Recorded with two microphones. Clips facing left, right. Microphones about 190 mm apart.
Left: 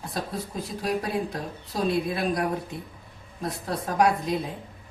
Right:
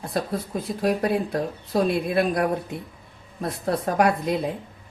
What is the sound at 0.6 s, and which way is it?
A woman's voice, 60° right (ahead or behind).